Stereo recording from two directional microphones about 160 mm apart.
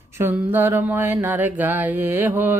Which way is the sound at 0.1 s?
15° right (ahead or behind).